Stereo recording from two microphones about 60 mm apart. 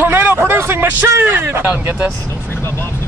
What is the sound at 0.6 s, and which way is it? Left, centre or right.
Vehicle, right.